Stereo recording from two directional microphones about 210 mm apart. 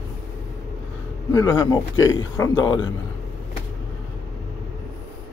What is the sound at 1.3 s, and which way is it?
Speech, 15° left (ahead or behind).